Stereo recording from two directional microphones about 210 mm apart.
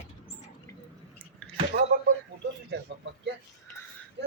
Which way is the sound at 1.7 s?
45° right (ahead or behind).